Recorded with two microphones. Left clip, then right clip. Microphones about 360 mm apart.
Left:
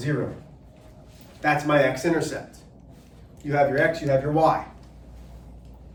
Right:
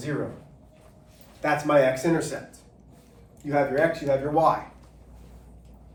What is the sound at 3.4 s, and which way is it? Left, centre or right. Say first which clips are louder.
Speech: left 2 dB; centre.